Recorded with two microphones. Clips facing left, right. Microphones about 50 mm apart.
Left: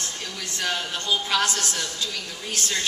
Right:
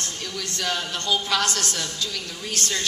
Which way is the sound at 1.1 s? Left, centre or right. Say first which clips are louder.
Even; left.